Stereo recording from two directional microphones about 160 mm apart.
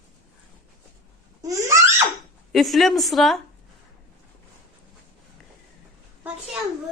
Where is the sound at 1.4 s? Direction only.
20° right (ahead or behind).